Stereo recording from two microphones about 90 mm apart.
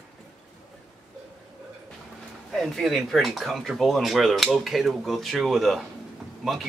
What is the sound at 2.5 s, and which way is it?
Speech, 5° left (ahead or behind).